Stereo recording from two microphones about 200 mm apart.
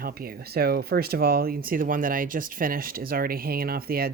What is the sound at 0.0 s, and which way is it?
Speech, 50° right (ahead or behind).